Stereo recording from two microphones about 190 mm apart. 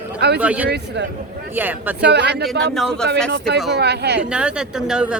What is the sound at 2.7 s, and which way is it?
Speech, centre (ahead or behind).